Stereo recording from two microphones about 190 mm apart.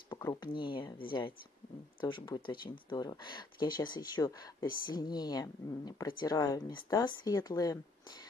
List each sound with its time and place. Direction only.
0.1 s speech: 20° left (ahead or behind)